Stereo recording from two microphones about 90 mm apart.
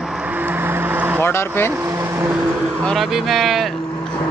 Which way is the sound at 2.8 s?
Centre (ahead or behind).